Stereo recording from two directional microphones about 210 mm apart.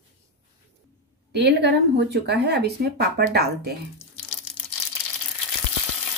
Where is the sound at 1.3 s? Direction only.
55° right (ahead or behind).